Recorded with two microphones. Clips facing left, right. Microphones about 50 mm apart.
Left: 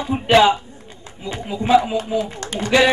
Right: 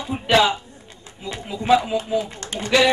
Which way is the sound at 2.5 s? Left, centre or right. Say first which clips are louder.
Left 2 dB; left.